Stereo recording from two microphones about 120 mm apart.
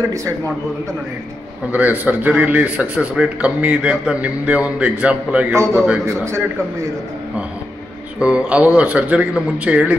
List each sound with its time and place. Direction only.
1.7 s a man's voice: 15° right (ahead or behind)
5.5 s a man's voice: 20° right (ahead or behind)
8.2 s a man's voice: 10° right (ahead or behind)